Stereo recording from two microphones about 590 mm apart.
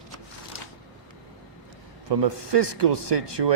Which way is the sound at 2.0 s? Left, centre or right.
Right.